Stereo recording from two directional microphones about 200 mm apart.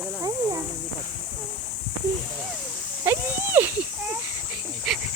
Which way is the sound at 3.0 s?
10° right (ahead or behind).